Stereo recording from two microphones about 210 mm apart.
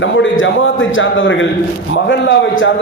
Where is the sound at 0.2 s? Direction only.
65° left (ahead or behind).